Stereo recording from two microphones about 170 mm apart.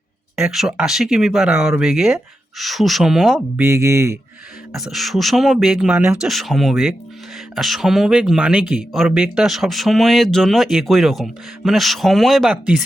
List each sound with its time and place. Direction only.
0.3 s speech: centre (ahead or behind)
3.6 s speech: 15° right (ahead or behind)
4.7 s speech: centre (ahead or behind)